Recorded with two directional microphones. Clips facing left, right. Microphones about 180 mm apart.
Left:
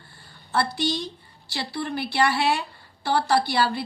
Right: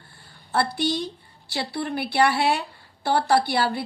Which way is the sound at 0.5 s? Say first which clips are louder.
Right 1 dB; 55° right (ahead or behind).